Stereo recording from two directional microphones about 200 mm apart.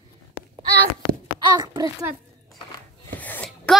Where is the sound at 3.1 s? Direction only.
10° left (ahead or behind).